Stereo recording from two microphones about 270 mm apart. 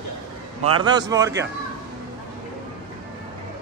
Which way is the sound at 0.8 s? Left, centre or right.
Centre.